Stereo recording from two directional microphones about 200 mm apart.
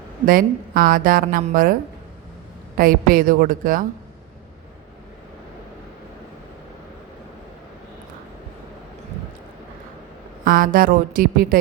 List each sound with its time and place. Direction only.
0.3 s a woman's voice: 45° right (ahead or behind)
2.7 s a woman's voice: 45° right (ahead or behind)
10.4 s a woman's voice: 45° right (ahead or behind)